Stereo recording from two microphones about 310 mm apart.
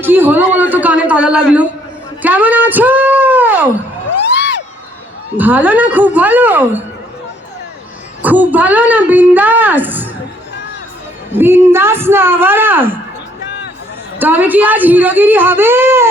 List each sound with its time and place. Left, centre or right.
0.0 s a woman's voice: centre
4.2 s crowd: left
5.4 s a woman's voice: centre
8.2 s a woman's voice: centre
11.3 s a woman's voice: centre
14.2 s a woman's voice: centre